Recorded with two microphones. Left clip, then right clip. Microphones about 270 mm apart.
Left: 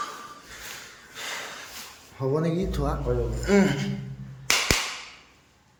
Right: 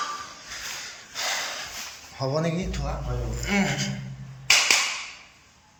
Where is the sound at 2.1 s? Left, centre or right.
Centre.